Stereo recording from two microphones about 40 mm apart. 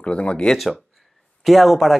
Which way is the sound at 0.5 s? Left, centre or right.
Centre.